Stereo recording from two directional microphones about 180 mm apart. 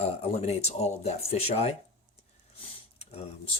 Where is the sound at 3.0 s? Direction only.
35° left (ahead or behind).